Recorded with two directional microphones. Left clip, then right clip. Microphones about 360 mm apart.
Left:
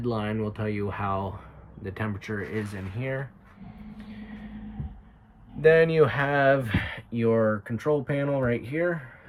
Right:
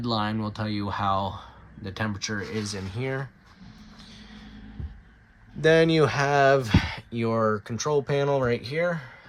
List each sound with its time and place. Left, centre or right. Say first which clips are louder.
0.0 s speech: right 2 dB; centre
4.0 s a sound: left 2 dB; centre
5.6 s speech: left 1 dB; centre